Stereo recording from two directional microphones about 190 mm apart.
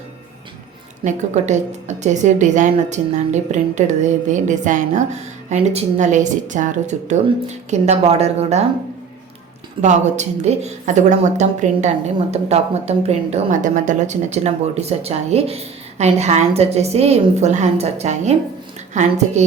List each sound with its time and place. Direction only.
1.0 s speech: 40° right (ahead or behind)
9.8 s speech: 40° right (ahead or behind)